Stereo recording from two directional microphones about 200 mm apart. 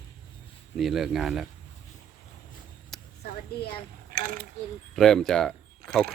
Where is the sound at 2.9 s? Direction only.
Centre (ahead or behind).